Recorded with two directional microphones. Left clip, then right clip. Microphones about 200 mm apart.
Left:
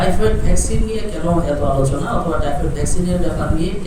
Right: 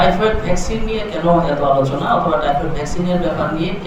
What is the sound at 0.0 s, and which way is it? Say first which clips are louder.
Speech: right 4 dB; 25° left (ahead or behind).